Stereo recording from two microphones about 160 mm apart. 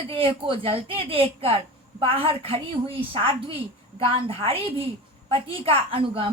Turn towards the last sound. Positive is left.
turn(degrees=-35)  # may be behind; listen again after turning